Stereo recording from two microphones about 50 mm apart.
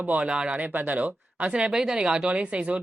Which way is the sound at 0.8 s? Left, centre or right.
Right.